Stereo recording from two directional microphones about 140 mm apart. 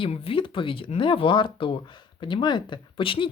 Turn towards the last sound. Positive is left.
turn(degrees=40)  # may be behind; listen again after turning